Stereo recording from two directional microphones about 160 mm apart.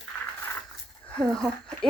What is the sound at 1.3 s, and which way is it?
Speech, 5° left (ahead or behind).